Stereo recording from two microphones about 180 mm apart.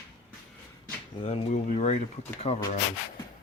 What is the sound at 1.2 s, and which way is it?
Speech, 40° left (ahead or behind).